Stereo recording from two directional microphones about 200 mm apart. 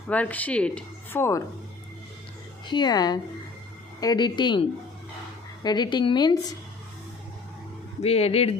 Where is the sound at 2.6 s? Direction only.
20° left (ahead or behind).